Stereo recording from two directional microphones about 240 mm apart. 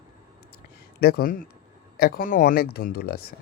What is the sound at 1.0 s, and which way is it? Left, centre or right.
Speech, left.